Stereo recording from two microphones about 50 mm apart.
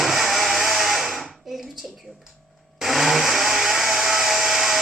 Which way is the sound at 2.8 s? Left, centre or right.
Centre.